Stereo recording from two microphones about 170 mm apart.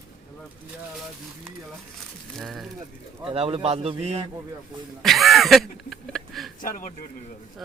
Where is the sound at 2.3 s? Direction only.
Centre (ahead or behind).